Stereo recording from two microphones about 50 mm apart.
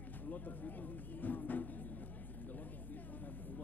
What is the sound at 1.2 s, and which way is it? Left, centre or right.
Speech, left.